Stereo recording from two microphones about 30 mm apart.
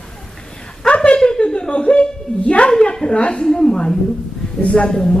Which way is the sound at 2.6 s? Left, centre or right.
Left.